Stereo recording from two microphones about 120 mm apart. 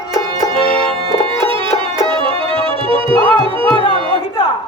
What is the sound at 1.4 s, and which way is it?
Music, 45° right (ahead or behind).